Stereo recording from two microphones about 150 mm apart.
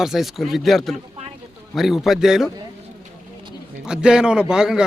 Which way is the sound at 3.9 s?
5° right (ahead or behind).